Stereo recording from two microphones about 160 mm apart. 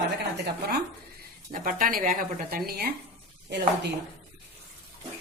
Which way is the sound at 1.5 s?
60° right (ahead or behind).